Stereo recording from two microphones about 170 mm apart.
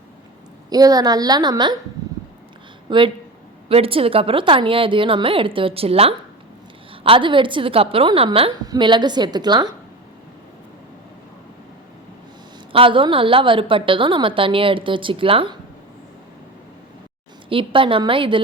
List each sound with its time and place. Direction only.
0.7 s a woman's voice: 20° right (ahead or behind)
2.9 s a woman's voice: 30° right (ahead or behind)
12.7 s a woman's voice: 30° right (ahead or behind)
17.5 s a woman's voice: 30° right (ahead or behind)